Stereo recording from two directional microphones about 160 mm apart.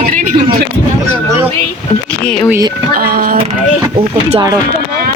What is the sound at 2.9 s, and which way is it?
Speech, 75° right (ahead or behind).